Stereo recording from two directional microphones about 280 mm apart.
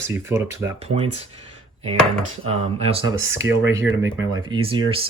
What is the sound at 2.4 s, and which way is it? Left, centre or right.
Speech, right.